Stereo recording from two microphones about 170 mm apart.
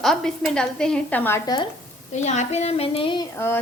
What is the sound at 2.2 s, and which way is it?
Speech, 45° left (ahead or behind).